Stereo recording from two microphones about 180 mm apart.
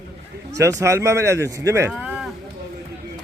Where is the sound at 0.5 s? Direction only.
15° right (ahead or behind).